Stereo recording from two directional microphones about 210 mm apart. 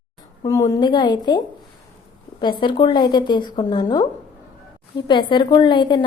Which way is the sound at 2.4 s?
25° left (ahead or behind).